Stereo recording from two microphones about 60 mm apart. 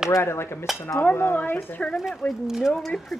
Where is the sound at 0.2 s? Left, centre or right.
Left.